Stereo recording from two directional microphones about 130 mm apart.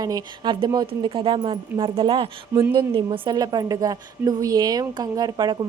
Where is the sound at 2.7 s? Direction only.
40° right (ahead or behind).